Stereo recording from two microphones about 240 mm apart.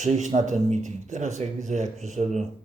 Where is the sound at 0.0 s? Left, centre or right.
Right.